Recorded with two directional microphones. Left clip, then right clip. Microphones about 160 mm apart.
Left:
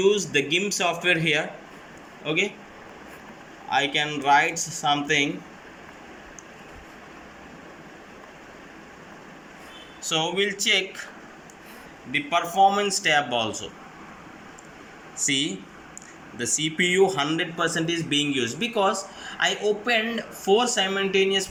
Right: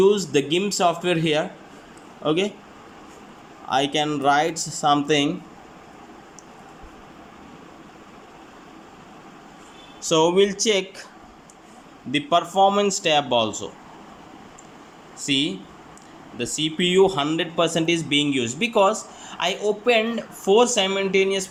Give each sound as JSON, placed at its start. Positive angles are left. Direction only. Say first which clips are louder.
{"t": 0.0, "sound": "speech", "louder": "right 3 dB", "side_deg": -30}
{"t": 3.7, "sound": "speech", "louder": "right 2 dB", "side_deg": -30}
{"t": 10.0, "sound": "speech", "louder": "right 7 dB", "side_deg": -40}
{"t": 12.1, "sound": "speech", "louder": "right 3 dB", "side_deg": -35}
{"t": 15.2, "sound": "speech", "louder": "right 2 dB", "side_deg": -15}